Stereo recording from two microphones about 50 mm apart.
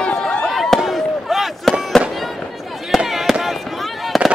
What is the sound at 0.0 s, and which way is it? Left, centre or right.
Chop, left.